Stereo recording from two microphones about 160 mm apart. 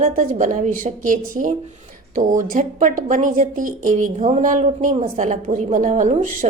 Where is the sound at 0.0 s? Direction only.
55° right (ahead or behind).